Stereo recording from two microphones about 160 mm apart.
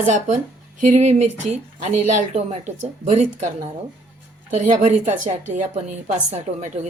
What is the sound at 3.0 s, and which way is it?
Speech, 40° right (ahead or behind).